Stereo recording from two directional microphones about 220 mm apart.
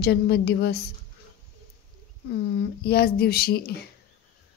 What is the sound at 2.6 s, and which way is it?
A woman's voice, 45° left (ahead or behind).